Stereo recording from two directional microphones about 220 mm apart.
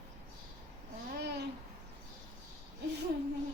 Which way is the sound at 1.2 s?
50° right (ahead or behind).